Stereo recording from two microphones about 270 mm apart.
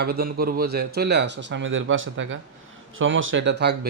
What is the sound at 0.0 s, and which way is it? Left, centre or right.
Speech, right.